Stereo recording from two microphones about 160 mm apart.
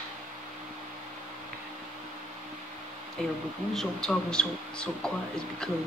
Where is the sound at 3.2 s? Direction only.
Centre (ahead or behind).